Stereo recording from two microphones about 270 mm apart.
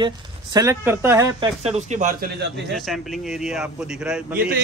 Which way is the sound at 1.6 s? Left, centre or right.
Right.